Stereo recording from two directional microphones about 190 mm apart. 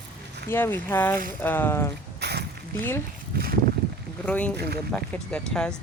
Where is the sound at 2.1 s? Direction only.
60° right (ahead or behind).